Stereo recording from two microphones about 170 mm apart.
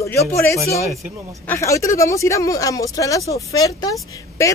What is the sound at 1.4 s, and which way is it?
A woman's voice, 15° left (ahead or behind).